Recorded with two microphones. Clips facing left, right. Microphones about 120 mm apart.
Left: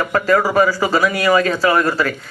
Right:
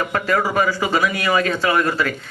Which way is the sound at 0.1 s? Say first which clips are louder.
Left 7 dB; 40° left (ahead or behind).